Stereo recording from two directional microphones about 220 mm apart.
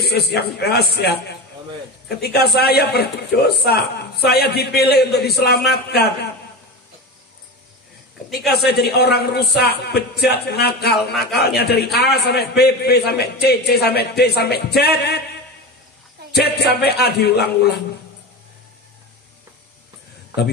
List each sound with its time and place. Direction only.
0.0 s a man's voice: 45° left (ahead or behind)
5.2 s a man's voice: centre (ahead or behind)
5.5 s a man's voice: 45° left (ahead or behind)
8.5 s a man's voice: 45° left (ahead or behind)
16.6 s a man's voice: 45° left (ahead or behind)